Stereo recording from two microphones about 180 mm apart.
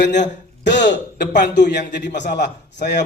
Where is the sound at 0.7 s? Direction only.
75° left (ahead or behind).